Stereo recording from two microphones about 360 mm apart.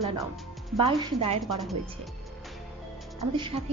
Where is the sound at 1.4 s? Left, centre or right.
Centre.